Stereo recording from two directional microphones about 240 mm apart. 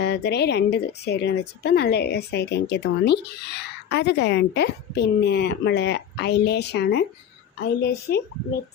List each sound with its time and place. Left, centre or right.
0.0 s a woman's voice: left
8.1 s a woman's voice: left